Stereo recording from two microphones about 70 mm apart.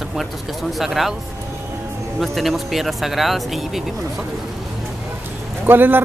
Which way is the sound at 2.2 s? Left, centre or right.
Centre.